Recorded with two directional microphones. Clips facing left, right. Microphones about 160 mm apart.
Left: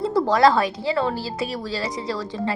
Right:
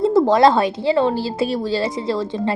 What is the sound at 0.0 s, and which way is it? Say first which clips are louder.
A woman's voice: right 4 dB; 20° right (ahead or behind).